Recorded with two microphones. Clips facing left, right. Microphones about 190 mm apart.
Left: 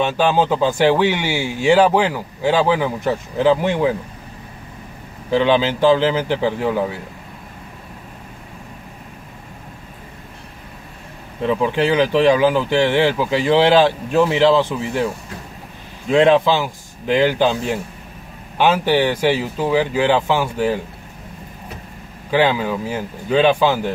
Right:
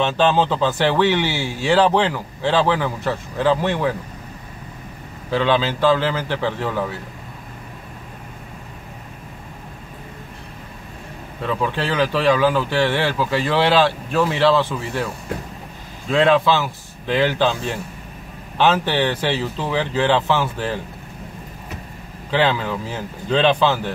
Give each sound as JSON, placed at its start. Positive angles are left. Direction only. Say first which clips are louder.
{"t": 0.0, "sound": "speech", "louder": "left 1 dB", "side_deg": 10}
{"t": 5.3, "sound": "speech", "louder": "left 3 dB", "side_deg": 15}
{"t": 11.4, "sound": "speech", "louder": "left 5 dB", "side_deg": 15}
{"t": 16.1, "sound": "speech", "louder": "left 3 dB", "side_deg": 20}
{"t": 22.3, "sound": "speech", "louder": "left 3 dB", "side_deg": 15}